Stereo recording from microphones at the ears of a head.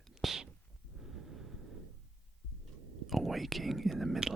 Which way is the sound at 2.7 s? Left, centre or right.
Right.